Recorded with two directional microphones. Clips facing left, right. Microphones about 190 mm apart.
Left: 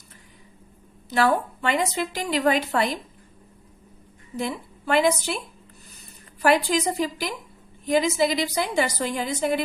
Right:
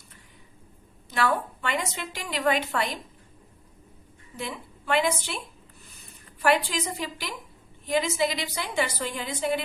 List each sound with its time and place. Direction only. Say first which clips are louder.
1.1 s a woman's voice: left 5 dB; 35° left (ahead or behind)
4.4 s a woman's voice: left 7 dB; 40° left (ahead or behind)
6.4 s a woman's voice: left 4 dB; 40° left (ahead or behind)